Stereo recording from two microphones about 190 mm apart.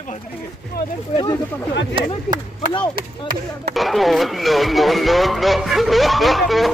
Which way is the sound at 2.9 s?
50° right (ahead or behind).